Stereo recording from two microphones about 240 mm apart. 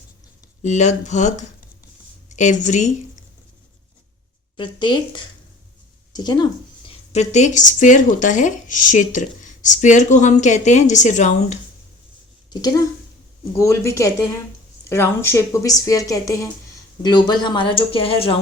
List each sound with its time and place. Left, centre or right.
0.6 s a woman's voice: left
4.5 s a woman's voice: centre
12.5 s speech: centre